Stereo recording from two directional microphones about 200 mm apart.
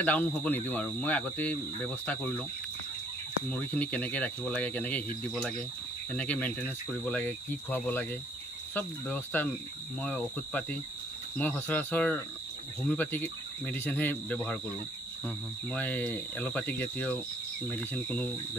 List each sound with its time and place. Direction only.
0.0 s speech: 5° left (ahead or behind)
3.4 s speech: 5° left (ahead or behind)